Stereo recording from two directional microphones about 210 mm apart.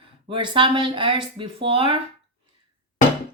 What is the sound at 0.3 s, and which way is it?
Speech, 25° right (ahead or behind).